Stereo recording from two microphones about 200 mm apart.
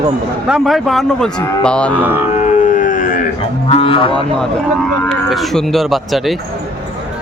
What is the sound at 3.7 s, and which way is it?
Speech, 30° left (ahead or behind).